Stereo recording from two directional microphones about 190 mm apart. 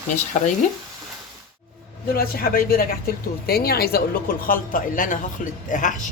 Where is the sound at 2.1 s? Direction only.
50° left (ahead or behind).